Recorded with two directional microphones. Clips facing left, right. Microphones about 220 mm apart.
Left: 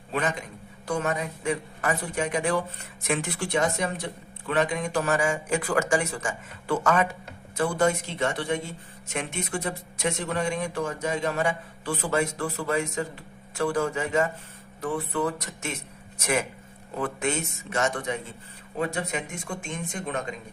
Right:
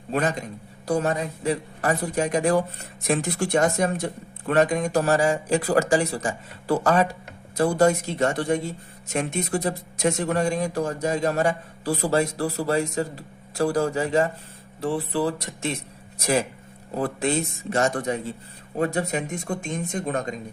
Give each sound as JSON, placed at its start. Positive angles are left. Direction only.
{"t": 0.1, "sound": "a man's voice", "side_deg": -40}